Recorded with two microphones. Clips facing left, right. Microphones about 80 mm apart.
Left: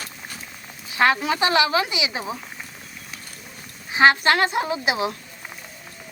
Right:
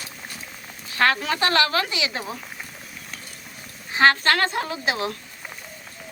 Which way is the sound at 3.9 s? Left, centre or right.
Centre.